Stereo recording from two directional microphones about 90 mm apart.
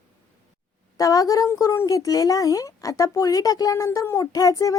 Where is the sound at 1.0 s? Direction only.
40° left (ahead or behind).